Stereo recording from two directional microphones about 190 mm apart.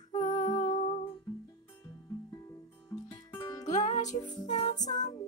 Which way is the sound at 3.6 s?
40° left (ahead or behind).